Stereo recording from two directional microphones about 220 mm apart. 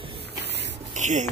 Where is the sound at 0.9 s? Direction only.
35° right (ahead or behind).